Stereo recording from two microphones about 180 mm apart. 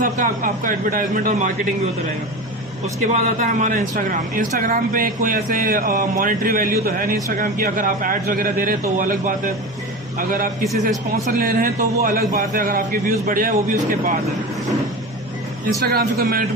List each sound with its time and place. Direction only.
0.0 s a man's voice: 50° right (ahead or behind)
2.8 s a man's voice: 40° right (ahead or behind)
15.8 s a man's voice: 60° right (ahead or behind)